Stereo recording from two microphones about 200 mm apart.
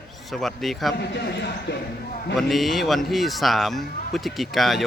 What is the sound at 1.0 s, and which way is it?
Speech, 55° left (ahead or behind).